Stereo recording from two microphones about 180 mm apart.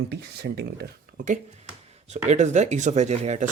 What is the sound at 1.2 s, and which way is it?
Speech, 40° right (ahead or behind).